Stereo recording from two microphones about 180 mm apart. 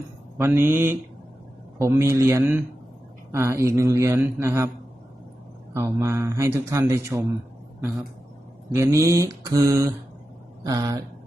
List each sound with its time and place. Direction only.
0.3 s a man's voice: 15° right (ahead or behind)
5.7 s a man's voice: 15° right (ahead or behind)
8.7 s a man's voice: 15° right (ahead or behind)